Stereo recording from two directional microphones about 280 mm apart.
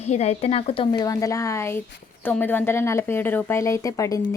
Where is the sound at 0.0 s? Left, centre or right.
Left.